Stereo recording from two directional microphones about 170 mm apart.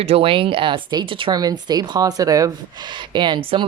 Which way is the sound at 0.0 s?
35° right (ahead or behind).